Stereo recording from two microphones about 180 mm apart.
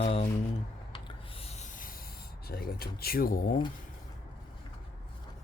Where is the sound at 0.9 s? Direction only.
30° left (ahead or behind); by 3.6 s 55° left (ahead or behind).